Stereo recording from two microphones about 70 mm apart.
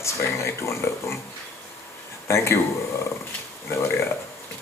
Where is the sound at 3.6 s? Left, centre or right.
Left.